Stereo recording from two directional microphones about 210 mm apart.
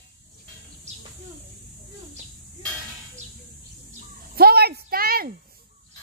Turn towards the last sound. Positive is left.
turn(degrees=-45)  # may be behind; listen again after turning